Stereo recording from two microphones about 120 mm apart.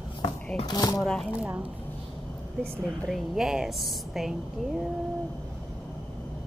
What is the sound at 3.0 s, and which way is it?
A woman's voice, 5° right (ahead or behind).